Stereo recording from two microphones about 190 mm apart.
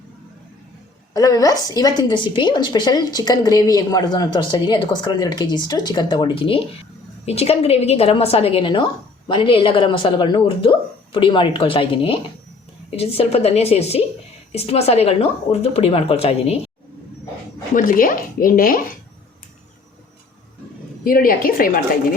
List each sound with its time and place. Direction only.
1.1 s a woman's voice: 20° left (ahead or behind)
17.7 s speech: 45° left (ahead or behind)
21.0 s speech: 50° left (ahead or behind)